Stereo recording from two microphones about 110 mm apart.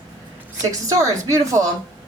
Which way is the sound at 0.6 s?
30° right (ahead or behind).